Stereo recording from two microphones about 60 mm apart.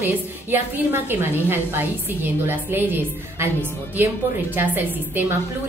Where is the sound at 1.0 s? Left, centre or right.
Right.